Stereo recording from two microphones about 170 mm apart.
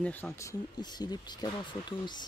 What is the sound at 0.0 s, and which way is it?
Speech, 10° left (ahead or behind).